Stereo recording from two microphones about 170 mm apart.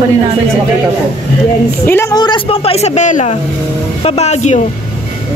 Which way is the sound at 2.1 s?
25° left (ahead or behind).